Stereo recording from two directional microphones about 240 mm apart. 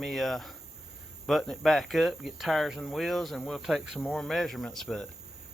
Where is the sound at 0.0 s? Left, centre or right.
Centre.